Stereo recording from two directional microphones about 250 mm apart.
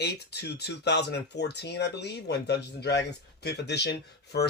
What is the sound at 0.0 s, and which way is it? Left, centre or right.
Speech, left.